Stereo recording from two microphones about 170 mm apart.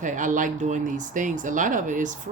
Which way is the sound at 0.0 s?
50° right (ahead or behind).